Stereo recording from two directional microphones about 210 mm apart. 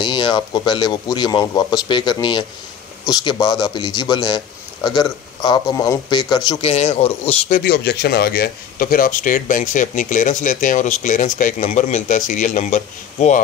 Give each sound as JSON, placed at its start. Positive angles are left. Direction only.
{"t": 0.0, "sound": "a man's voice", "side_deg": 20}